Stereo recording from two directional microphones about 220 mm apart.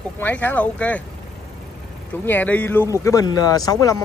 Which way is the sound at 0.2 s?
10° left (ahead or behind).